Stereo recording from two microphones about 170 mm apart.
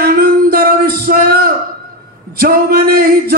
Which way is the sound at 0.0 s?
60° right (ahead or behind).